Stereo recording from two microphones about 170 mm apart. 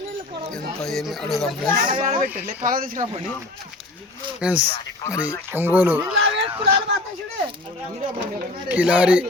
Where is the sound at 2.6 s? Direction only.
55° right (ahead or behind).